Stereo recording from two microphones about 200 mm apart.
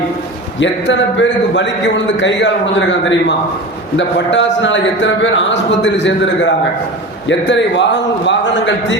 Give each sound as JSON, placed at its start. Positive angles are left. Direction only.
{"t": 0.6, "sound": "a man's voice", "side_deg": 65}